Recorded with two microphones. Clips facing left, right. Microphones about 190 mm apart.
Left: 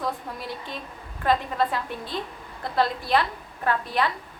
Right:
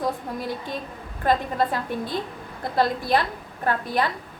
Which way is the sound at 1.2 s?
40° right (ahead or behind).